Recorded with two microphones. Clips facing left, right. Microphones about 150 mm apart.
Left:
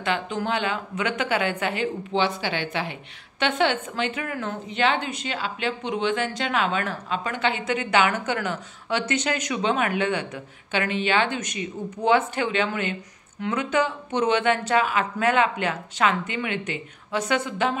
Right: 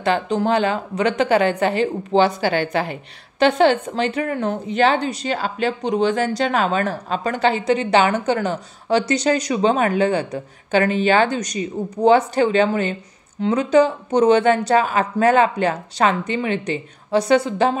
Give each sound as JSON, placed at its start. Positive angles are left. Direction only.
{"t": 0.0, "sound": "speech", "side_deg": -35}